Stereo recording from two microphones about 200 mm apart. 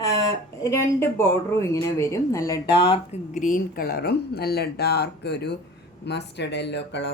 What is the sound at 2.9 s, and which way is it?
Speech, 35° left (ahead or behind).